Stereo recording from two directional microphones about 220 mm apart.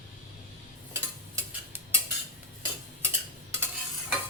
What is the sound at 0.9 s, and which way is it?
Tick-tock, 10° right (ahead or behind).